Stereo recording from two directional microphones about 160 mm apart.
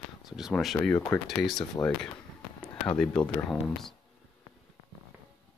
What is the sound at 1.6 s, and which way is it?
Speech, 25° left (ahead or behind).